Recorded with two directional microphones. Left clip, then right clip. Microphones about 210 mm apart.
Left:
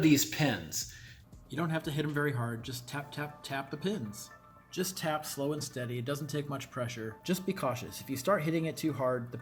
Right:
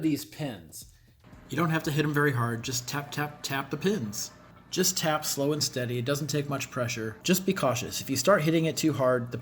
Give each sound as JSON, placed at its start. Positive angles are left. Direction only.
{"t": 0.0, "sound": "speech", "side_deg": -45}
{"t": 1.5, "sound": "speech", "side_deg": 5}